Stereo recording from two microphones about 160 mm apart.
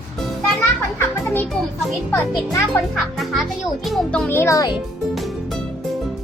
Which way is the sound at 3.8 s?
5° left (ahead or behind).